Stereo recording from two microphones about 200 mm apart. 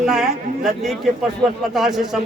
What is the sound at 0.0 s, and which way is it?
A man's voice, centre (ahead or behind).